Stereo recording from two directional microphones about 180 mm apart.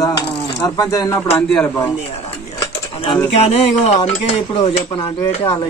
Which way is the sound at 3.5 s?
35° left (ahead or behind).